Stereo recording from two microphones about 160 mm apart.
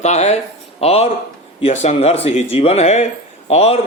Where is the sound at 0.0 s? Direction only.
45° left (ahead or behind).